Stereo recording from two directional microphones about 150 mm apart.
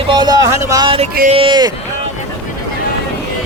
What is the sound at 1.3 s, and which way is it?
Speech, 35° right (ahead or behind).